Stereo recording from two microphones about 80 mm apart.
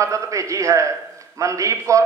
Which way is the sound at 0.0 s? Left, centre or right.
Right.